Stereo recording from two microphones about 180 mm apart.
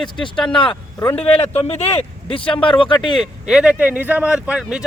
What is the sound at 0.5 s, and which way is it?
Speech, 30° left (ahead or behind).